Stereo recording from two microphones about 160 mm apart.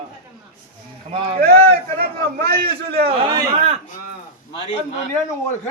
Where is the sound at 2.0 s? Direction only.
75° right (ahead or behind).